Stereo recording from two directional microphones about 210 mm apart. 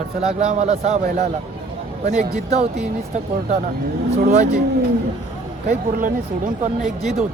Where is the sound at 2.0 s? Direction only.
45° right (ahead or behind).